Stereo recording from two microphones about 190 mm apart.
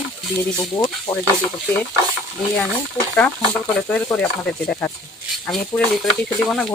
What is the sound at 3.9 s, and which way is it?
Speech, 5° left (ahead or behind).